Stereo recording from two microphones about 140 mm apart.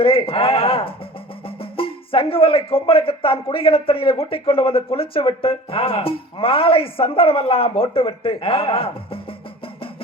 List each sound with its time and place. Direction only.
0.0 s speech: 40° left (ahead or behind)